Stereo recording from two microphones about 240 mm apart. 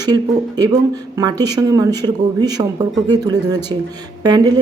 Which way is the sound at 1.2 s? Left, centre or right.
Centre.